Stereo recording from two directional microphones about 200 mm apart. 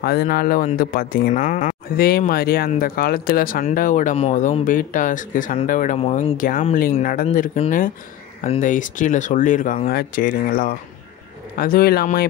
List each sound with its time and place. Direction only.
0.0 s speech: 50° left (ahead or behind)
1.4 s speech: 35° left (ahead or behind)
7.5 s speech: 30° left (ahead or behind); by 12.3 s 50° left (ahead or behind)